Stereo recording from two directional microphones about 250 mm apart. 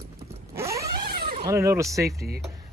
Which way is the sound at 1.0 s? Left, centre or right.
Right.